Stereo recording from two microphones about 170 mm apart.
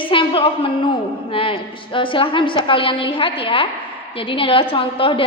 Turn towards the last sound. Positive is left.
turn(degrees=30)  # may be behind; listen again after turning